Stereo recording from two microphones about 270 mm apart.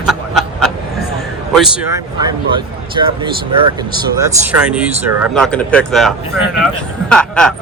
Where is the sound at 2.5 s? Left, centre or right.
Centre.